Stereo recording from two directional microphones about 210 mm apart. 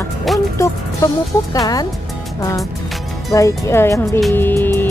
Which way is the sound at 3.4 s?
15° left (ahead or behind).